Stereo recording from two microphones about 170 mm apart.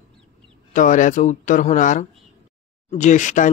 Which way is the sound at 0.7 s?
50° left (ahead or behind).